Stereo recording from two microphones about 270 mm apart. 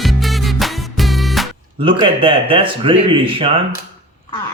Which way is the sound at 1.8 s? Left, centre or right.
Centre.